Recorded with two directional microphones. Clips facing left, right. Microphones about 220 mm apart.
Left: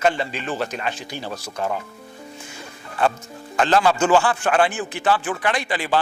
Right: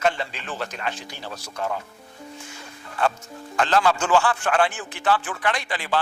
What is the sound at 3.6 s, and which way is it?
A man's voice, 15° left (ahead or behind).